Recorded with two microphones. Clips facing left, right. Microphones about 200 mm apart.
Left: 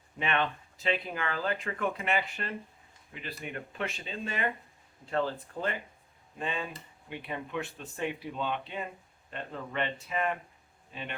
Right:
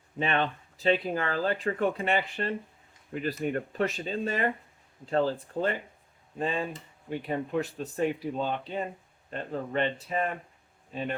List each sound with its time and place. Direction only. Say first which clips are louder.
0.2 s speech: right 3 dB; 35° right (ahead or behind)
3.1 s speech: right 11 dB; 45° right (ahead or behind)